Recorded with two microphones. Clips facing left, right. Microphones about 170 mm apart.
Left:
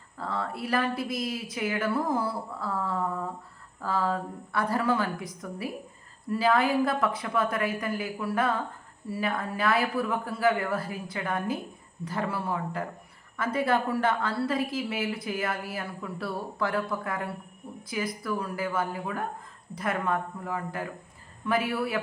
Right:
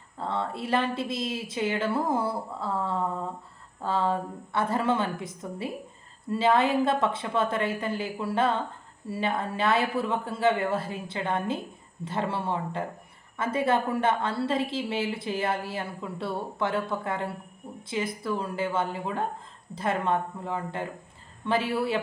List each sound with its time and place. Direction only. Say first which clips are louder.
0.2 s speech: right 2 dB; 25° right (ahead or behind)